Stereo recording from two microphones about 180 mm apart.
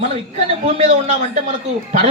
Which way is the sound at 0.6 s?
40° right (ahead or behind).